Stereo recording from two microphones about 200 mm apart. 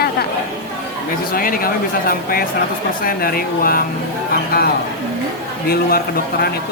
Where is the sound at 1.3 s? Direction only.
45° left (ahead or behind).